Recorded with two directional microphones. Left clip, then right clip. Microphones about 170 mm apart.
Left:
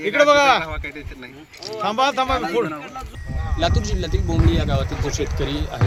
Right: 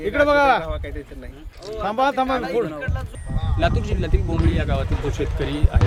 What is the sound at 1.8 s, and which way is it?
Speech, 55° right (ahead or behind).